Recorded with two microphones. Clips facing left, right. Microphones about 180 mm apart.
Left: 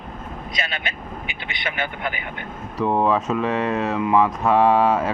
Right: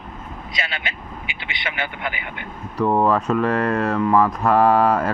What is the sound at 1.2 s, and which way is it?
Speech, 15° right (ahead or behind).